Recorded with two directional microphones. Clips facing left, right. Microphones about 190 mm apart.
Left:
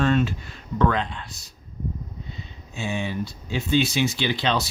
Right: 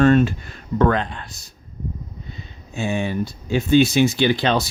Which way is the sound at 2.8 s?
50° right (ahead or behind).